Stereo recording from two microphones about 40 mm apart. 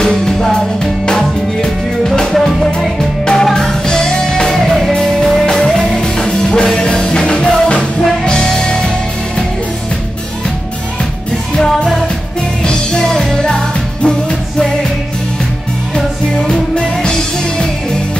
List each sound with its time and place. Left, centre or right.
0.0 s music: centre
2.3 s music: centre; by 7.8 s left
8.3 s music: centre
12.6 s music: centre
16.4 s music: centre